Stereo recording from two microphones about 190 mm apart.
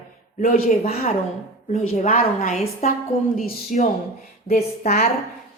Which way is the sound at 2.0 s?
50° left (ahead or behind).